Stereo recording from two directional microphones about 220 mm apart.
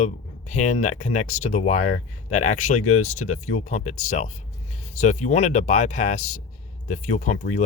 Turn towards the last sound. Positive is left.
turn(degrees=35)  # may be behind; listen again after turning